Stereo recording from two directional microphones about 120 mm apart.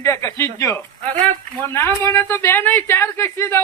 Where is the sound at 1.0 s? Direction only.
90° right.